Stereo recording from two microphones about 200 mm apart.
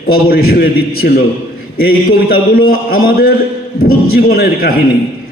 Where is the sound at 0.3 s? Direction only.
50° left (ahead or behind).